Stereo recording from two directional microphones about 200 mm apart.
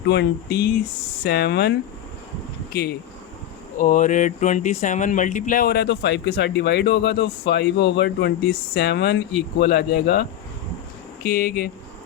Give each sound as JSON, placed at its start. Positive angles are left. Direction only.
{"t": 0.1, "sound": "speech", "side_deg": 55}
{"t": 3.8, "sound": "speech", "side_deg": 40}